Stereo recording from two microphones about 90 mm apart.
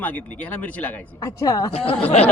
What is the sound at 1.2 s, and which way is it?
Speech, 40° left (ahead or behind).